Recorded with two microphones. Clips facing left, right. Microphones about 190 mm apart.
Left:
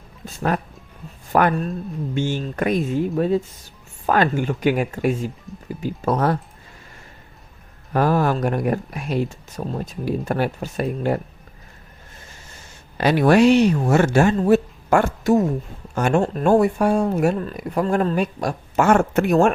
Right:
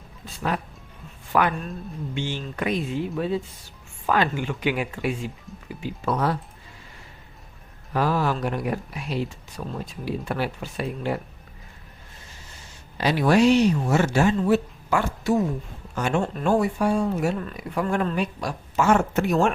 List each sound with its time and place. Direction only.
0.3 s speech: 45° left (ahead or behind)
7.9 s speech: 50° left (ahead or behind)
13.0 s speech: 55° left (ahead or behind)
17.3 s speech: 40° left (ahead or behind)